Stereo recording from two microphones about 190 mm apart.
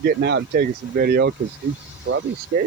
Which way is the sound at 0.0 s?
60° right (ahead or behind).